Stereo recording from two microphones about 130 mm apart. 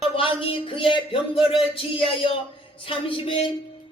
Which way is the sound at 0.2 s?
45° left (ahead or behind).